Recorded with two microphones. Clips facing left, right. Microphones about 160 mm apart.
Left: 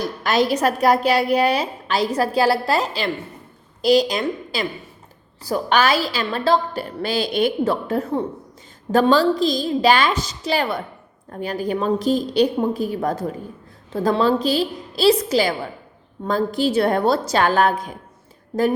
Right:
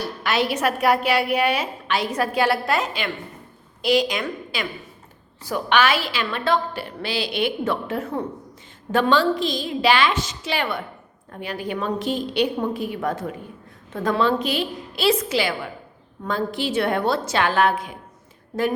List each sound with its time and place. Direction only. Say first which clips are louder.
0.0 s a woman's voice: left 4 dB; 40° left (ahead or behind)